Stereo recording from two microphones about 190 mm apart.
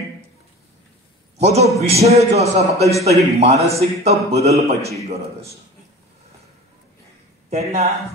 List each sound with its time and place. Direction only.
1.4 s a man's voice: 35° right (ahead or behind)
7.4 s speech: 35° right (ahead or behind)